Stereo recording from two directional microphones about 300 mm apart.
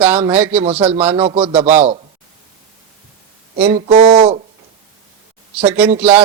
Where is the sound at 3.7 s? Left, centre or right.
Right.